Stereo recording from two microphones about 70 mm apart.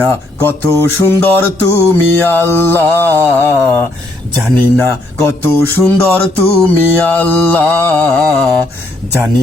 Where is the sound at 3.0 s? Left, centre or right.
Right.